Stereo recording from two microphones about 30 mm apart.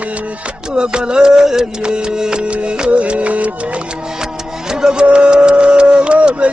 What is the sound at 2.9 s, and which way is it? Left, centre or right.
Music, right.